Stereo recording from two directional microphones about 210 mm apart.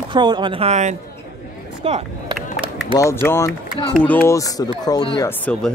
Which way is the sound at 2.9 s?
15° left (ahead or behind).